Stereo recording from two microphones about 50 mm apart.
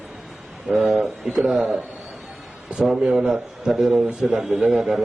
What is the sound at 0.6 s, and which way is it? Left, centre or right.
A man's voice, centre.